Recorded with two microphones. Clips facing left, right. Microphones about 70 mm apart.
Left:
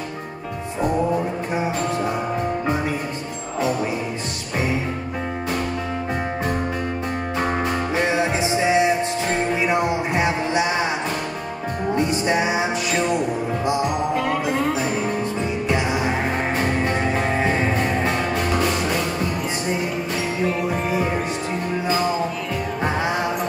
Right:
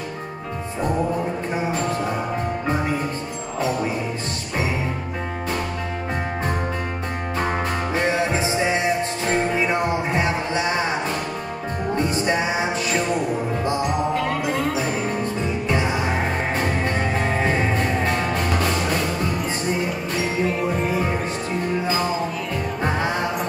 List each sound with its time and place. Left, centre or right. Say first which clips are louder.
7.9 s music: even; centre
12.3 s music: left 2 dB; centre